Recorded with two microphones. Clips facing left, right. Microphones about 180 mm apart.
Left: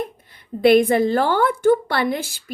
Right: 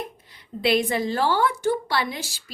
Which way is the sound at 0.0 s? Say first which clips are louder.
Left 6 dB; 55° left (ahead or behind).